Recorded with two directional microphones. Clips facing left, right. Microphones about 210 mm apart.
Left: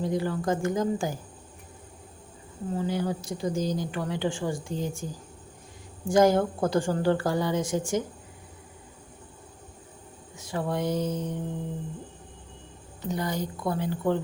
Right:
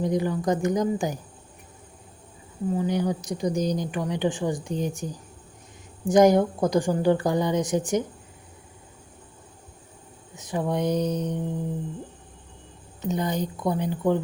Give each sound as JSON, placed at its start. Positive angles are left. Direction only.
{"t": 0.0, "sound": "speech", "side_deg": -20}
{"t": 2.7, "sound": "speech", "side_deg": -15}
{"t": 10.3, "sound": "speech", "side_deg": -20}
{"t": 13.0, "sound": "speech", "side_deg": -20}